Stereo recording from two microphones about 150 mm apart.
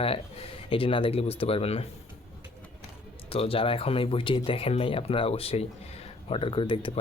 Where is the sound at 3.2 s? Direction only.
40° left (ahead or behind).